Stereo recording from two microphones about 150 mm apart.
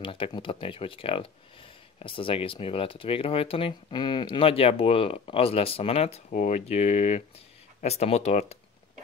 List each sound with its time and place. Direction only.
0.0 s speech: 35° left (ahead or behind)